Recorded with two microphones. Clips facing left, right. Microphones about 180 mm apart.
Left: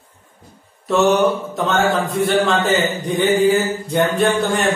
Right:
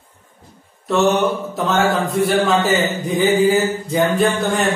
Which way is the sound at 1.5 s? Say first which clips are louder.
Even; centre (ahead or behind).